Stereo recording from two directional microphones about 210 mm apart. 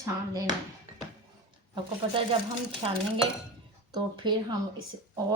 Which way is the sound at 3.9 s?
20° right (ahead or behind).